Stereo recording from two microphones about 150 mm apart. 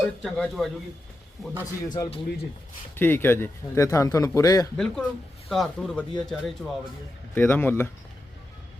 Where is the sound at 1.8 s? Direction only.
25° left (ahead or behind).